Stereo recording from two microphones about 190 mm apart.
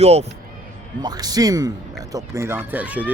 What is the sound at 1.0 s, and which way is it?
Speech, 20° right (ahead or behind).